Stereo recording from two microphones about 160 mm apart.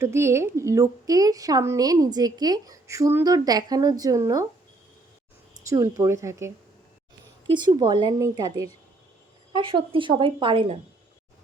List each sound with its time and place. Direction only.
0.0 s a woman's voice: 15° right (ahead or behind)
5.6 s speech: 20° right (ahead or behind)
7.5 s a woman's voice: 30° right (ahead or behind)